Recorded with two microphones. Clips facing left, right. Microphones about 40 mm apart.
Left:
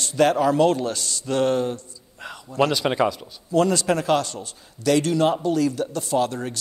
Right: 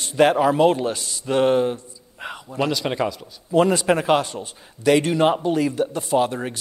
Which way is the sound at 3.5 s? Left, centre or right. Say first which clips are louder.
Right 2 dB; right.